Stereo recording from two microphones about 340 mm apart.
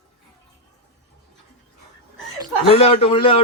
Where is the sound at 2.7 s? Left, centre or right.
Centre.